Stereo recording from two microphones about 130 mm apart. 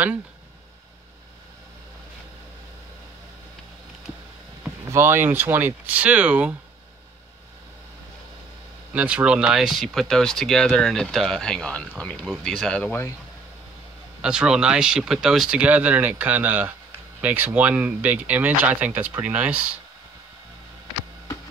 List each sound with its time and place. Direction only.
4.8 s speech: 20° right (ahead or behind)
8.9 s speech: 10° right (ahead or behind); by 13.1 s 15° left (ahead or behind)
14.2 s speech: 5° right (ahead or behind)